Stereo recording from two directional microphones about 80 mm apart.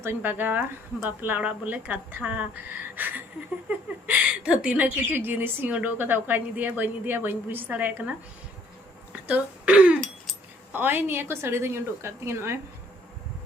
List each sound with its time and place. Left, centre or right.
0.0 s a woman's voice: right
5.1 s a woman's voice: right
9.2 s a woman's voice: centre; by 12.5 s right